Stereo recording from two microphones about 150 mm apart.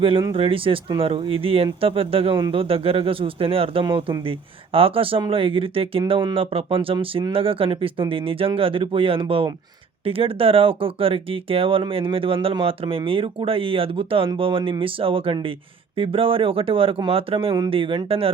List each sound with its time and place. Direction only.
0.3 s speech: 35° right (ahead or behind)